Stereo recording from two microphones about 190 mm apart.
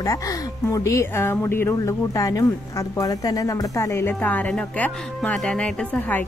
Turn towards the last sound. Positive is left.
turn(degrees=10)  # may be behind; listen again after turning